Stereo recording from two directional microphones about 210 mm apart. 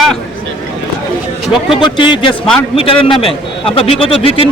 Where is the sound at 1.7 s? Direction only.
25° left (ahead or behind).